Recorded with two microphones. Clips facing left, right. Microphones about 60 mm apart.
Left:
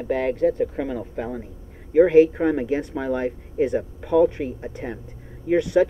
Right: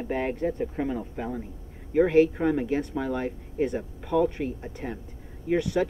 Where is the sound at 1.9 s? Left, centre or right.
Centre.